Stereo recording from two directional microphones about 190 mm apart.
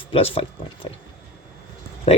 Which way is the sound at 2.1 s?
30° left (ahead or behind).